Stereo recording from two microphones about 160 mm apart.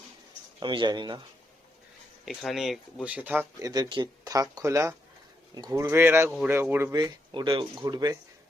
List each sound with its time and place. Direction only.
0.6 s speech: 30° right (ahead or behind)
2.2 s speech: centre (ahead or behind)
3.6 s speech: 25° right (ahead or behind)
5.9 s speech: 15° right (ahead or behind)
6.9 s speech: 25° right (ahead or behind)